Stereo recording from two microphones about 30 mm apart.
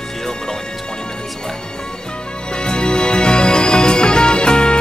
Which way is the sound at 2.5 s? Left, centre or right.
Left.